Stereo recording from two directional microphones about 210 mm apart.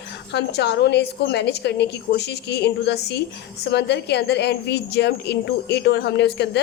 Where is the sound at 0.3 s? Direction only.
55° left (ahead or behind).